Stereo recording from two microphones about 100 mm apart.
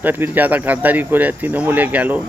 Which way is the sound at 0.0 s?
20° right (ahead or behind).